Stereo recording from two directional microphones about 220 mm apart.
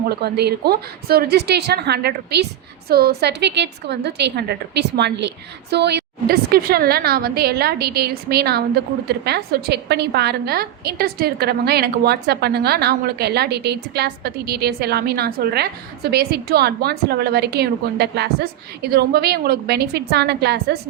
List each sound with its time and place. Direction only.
0.1 s a woman's voice: 45° right (ahead or behind)